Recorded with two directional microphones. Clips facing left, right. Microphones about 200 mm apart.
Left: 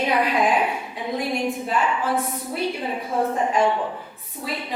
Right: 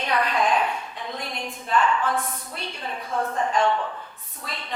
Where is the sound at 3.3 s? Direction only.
10° left (ahead or behind).